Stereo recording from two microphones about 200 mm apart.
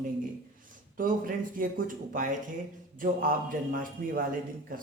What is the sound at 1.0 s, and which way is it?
Speech, 45° right (ahead or behind).